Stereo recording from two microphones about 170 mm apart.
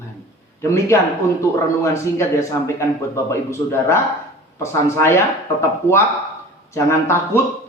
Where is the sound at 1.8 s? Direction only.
15° left (ahead or behind).